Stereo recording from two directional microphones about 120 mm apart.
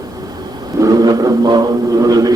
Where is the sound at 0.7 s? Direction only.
30° right (ahead or behind).